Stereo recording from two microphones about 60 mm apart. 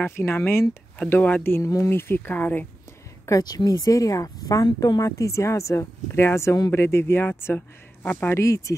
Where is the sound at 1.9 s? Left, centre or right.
Left.